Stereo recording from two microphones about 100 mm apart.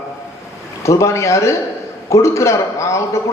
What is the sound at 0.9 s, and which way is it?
A man's voice, 30° left (ahead or behind).